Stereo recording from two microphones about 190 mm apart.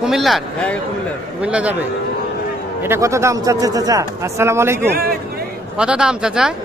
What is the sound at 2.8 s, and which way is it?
A man's voice, 15° right (ahead or behind).